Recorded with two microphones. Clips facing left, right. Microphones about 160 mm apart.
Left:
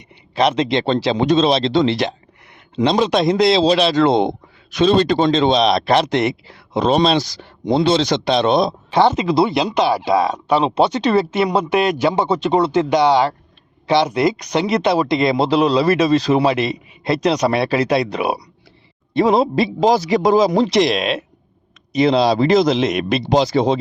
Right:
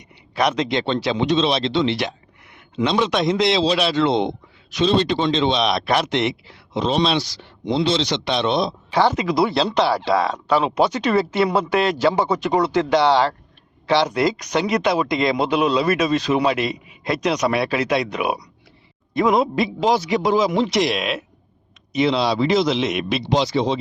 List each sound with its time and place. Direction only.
0.3 s a man's voice: 25° left (ahead or behind)
4.0 s speech: 50° left (ahead or behind)
8.9 s a man's voice: 25° left (ahead or behind); by 23.8 s 45° left (ahead or behind)